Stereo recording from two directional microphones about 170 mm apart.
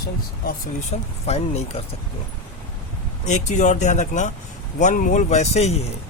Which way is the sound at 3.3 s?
45° left (ahead or behind).